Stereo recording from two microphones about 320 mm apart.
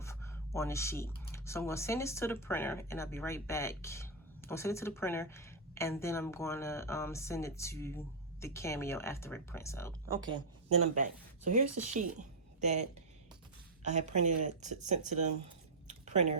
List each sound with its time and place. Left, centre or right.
0.0 s speech: centre
10.7 s speech: right
15.9 s a sound: right